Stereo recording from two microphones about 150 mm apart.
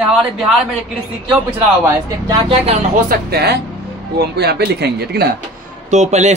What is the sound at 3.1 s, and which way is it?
Speech, 90° right.